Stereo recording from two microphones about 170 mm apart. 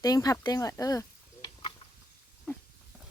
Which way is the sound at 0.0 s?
20° left (ahead or behind).